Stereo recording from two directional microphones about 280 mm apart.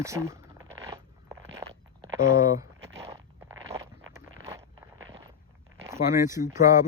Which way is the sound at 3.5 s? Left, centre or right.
Centre.